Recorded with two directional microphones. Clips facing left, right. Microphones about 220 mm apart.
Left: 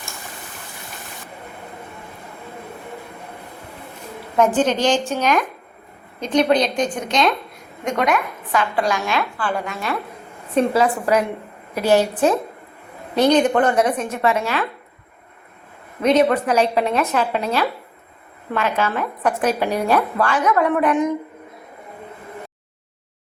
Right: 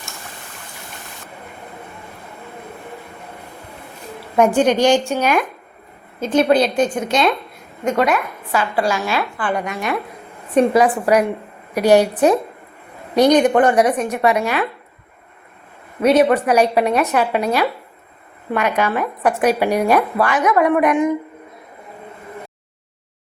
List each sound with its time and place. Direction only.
4.4 s a woman's voice: 10° right (ahead or behind)
9.4 s a woman's voice: 15° right (ahead or behind)
16.0 s a woman's voice: 10° right (ahead or behind)
18.8 s a woman's voice: 10° right (ahead or behind)